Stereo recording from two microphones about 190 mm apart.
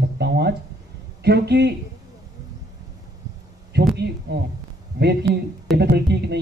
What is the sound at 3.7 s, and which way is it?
Speech, 60° right (ahead or behind).